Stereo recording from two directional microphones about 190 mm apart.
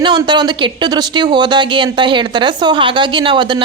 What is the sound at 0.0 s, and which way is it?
Speech, 25° right (ahead or behind).